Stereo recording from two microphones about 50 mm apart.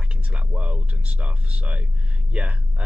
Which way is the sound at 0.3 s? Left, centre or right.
Right.